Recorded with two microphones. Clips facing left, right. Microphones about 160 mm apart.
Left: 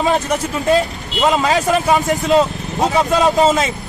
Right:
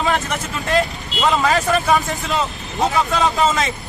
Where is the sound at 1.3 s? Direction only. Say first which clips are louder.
Left 1 dB; 20° left (ahead or behind).